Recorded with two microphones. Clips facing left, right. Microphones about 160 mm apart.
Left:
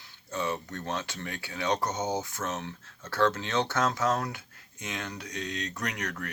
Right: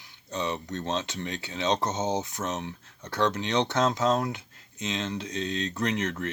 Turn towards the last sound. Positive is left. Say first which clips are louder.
# right 6 dB
turn(degrees=-25)  # may be behind; listen again after turning